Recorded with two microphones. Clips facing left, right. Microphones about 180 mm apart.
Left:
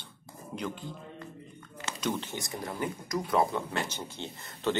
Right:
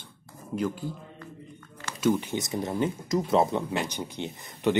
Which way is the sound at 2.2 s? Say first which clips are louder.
Right 7 dB; 20° right (ahead or behind).